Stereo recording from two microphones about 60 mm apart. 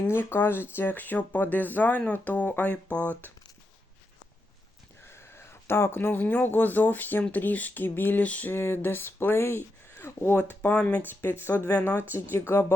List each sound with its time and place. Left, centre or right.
0.1 s speech: left
5.0 s speech: left
8.2 s speech: left
8.5 s speech: left
11.1 s speech: left
12.3 s speech: left